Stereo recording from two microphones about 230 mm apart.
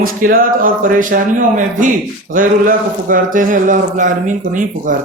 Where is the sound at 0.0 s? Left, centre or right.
Right.